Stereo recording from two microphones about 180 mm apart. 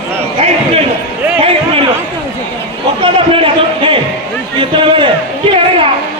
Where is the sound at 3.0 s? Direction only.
30° right (ahead or behind).